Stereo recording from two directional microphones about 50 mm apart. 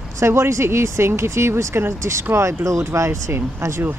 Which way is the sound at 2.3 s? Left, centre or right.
Right.